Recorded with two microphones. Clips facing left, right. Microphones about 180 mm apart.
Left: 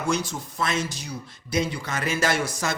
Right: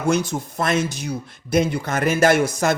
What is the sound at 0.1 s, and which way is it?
Speech, 55° right (ahead or behind).